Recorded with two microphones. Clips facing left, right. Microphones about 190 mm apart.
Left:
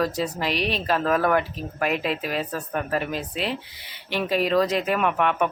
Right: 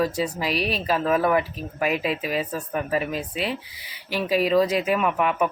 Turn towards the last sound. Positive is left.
turn(degrees=-5)  # may be behind; listen again after turning